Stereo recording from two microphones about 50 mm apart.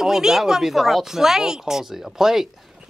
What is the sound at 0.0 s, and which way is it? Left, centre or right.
Speech, centre.